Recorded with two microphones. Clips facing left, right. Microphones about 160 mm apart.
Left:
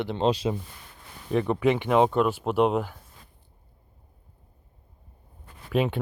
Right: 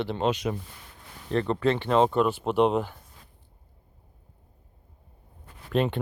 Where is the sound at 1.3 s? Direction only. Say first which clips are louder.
Left 2 dB; 10° left (ahead or behind).